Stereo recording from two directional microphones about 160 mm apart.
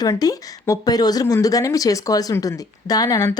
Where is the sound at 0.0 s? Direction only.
25° left (ahead or behind).